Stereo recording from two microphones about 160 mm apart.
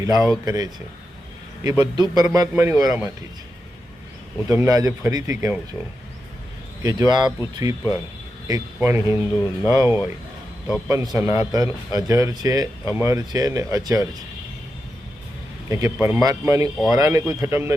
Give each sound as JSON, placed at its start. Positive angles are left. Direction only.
{"t": 0.0, "sound": "speech", "side_deg": -20}
{"t": 1.7, "sound": "speech", "side_deg": -25}
{"t": 4.4, "sound": "speech", "side_deg": -20}
{"t": 6.8, "sound": "speech", "side_deg": -25}
{"t": 15.7, "sound": "speech", "side_deg": -20}